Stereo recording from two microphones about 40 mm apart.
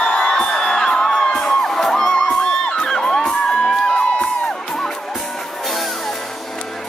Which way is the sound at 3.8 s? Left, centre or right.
Left.